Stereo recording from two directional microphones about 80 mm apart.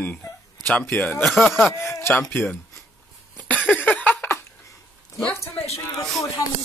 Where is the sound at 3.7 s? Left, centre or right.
Centre.